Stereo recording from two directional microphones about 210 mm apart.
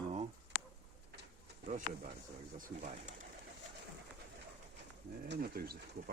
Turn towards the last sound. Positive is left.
turn(degrees=-45)  # may be behind; listen again after turning